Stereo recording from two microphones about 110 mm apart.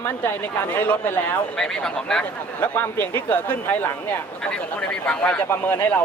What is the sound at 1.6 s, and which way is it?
Speech, 5° left (ahead or behind).